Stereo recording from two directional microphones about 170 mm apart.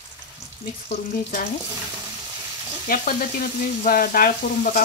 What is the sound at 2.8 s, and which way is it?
Speech, 60° left (ahead or behind).